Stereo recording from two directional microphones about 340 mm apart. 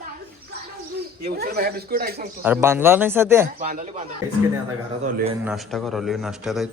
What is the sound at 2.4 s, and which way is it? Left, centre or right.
Speech, centre.